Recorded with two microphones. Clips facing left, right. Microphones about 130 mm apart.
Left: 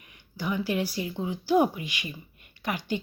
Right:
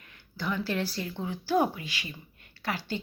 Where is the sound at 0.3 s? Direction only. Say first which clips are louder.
Left 2 dB; 15° left (ahead or behind).